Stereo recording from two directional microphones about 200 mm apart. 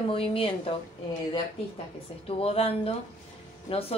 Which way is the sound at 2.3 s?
30° left (ahead or behind).